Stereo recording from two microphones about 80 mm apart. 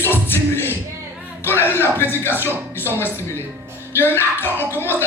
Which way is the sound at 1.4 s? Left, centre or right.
Left.